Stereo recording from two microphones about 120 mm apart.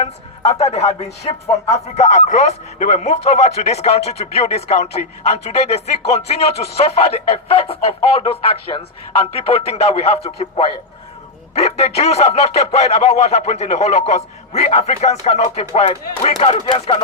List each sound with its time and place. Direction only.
0.0 s a man's voice: 60° left (ahead or behind)